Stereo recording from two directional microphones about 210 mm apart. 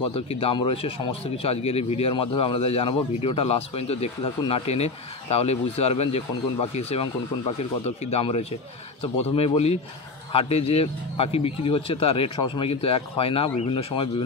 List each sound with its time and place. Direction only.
0.0 s speech: 25° left (ahead or behind)